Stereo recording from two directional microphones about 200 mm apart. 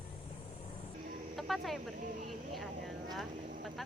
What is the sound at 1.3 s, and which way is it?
Vehicle, centre (ahead or behind).